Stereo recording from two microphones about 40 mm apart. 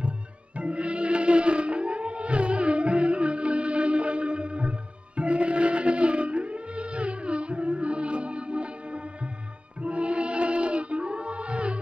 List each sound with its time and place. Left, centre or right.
0.6 s music: right